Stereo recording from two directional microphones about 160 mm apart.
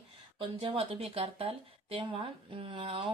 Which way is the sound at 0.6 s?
35° right (ahead or behind).